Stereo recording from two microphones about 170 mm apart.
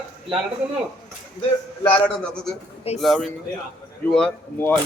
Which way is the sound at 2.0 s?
5° left (ahead or behind).